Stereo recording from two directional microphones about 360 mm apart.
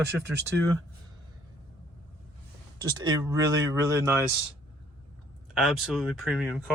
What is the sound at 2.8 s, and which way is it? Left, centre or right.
Speech, centre.